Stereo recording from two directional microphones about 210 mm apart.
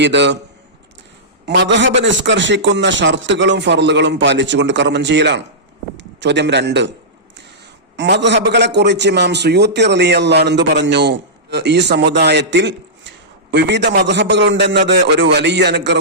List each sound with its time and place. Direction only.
0.0 s a man's voice: 55° right (ahead or behind)
1.5 s a man's voice: 55° right (ahead or behind)
7.9 s a man's voice: 55° right (ahead or behind)